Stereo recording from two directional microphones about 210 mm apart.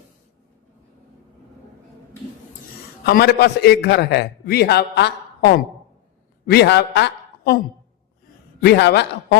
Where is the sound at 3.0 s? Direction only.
50° left (ahead or behind).